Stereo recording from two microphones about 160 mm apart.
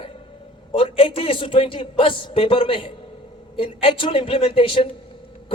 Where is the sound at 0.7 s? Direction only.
35° left (ahead or behind).